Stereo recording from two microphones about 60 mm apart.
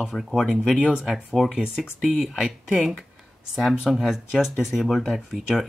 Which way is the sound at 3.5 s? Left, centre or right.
Centre.